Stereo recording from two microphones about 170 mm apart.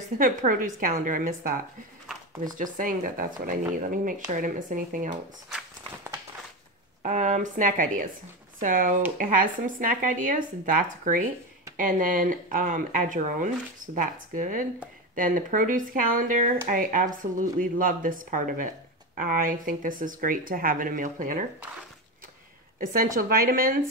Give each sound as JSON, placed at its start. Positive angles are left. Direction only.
{"t": 0.2, "sound": "speech", "side_deg": -55}
{"t": 7.0, "sound": "speech", "side_deg": -45}
{"t": 22.8, "sound": "speech", "side_deg": -60}